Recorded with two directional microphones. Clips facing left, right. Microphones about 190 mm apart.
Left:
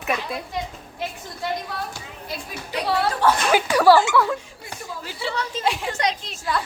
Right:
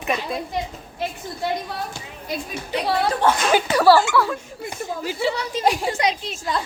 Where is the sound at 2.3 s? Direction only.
20° right (ahead or behind).